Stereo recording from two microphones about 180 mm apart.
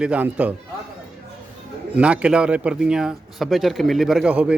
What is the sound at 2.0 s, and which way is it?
A man's voice, 5° right (ahead or behind).